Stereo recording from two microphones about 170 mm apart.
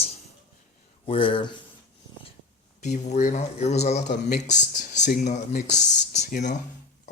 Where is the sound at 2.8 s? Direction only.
45° left (ahead or behind).